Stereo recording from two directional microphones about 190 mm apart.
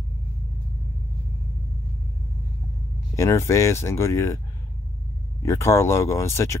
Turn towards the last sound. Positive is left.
turn(degrees=15)  # may be behind; listen again after turning